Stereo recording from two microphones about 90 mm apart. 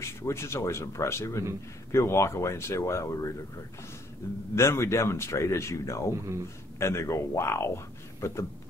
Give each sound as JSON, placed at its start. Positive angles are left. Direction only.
{"t": 0.0, "sound": "speech", "side_deg": 30}
{"t": 4.2, "sound": "speech", "side_deg": 35}